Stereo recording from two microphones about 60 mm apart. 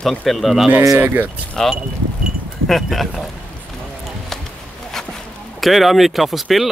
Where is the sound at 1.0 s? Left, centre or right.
Right.